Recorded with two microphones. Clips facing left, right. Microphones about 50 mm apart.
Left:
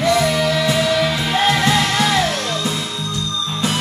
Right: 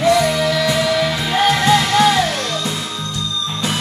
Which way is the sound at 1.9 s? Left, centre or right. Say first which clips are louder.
Right 4 dB; right.